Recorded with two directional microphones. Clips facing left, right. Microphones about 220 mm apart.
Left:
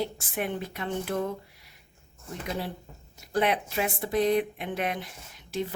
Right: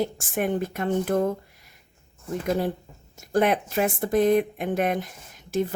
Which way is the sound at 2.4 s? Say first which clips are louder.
Right 8 dB; 50° right (ahead or behind).